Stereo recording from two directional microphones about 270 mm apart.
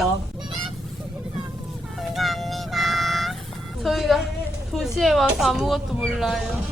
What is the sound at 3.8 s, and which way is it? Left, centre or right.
Speech, centre.